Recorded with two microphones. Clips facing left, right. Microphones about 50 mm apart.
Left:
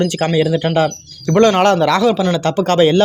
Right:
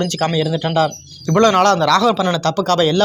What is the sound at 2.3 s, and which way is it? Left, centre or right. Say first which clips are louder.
Speech: left 2 dB; left.